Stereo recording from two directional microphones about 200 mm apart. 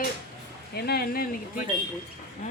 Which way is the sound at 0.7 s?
50° left (ahead or behind).